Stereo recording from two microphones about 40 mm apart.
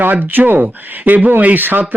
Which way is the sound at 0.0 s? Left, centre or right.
Right.